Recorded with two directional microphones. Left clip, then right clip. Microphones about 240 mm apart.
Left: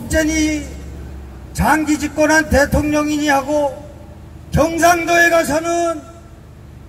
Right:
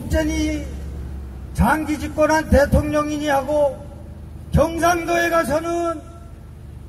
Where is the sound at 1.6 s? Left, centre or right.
Left.